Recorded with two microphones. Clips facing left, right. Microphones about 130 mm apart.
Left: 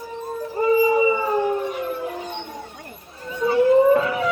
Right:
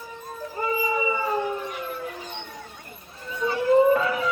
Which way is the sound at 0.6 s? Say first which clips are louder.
Left 9 dB; 30° left (ahead or behind).